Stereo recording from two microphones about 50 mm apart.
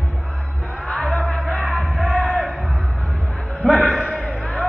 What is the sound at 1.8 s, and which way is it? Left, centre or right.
Music, centre.